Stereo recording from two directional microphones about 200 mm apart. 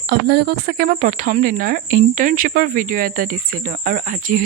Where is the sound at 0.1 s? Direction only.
55° right (ahead or behind).